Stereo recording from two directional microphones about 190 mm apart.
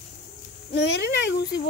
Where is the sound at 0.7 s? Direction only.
65° left (ahead or behind).